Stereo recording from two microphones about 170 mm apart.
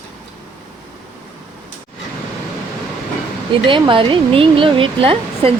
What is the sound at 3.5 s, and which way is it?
Speech, 30° right (ahead or behind).